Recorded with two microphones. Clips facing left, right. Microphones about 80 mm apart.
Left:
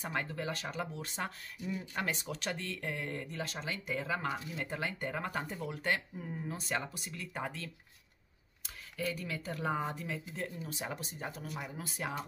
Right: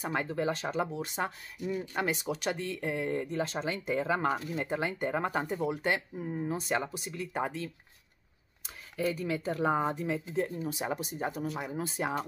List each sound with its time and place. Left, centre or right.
0.0 s speech: centre
1.6 s speech: right
2.0 s speech: centre